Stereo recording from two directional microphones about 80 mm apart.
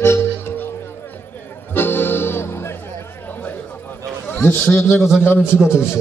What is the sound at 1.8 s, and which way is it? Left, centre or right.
Music, left.